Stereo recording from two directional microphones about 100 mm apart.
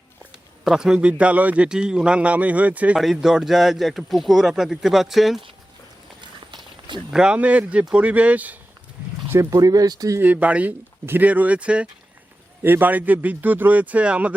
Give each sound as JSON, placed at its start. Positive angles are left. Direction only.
{"t": 0.6, "sound": "a man's voice", "side_deg": -5}
{"t": 3.0, "sound": "speech", "side_deg": -5}
{"t": 6.5, "sound": "walk", "side_deg": -50}
{"t": 7.1, "sound": "a man's voice", "side_deg": -10}
{"t": 9.3, "sound": "speech", "side_deg": -30}
{"t": 10.2, "sound": "a man's voice", "side_deg": -15}